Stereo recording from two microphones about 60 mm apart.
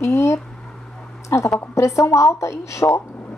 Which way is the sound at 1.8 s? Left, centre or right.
Left.